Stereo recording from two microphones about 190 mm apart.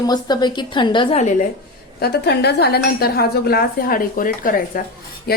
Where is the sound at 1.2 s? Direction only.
40° left (ahead or behind).